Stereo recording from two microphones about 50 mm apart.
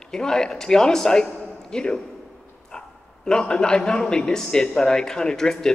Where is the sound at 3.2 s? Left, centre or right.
Centre.